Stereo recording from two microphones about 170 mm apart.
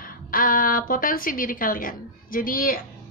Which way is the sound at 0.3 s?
55° left (ahead or behind).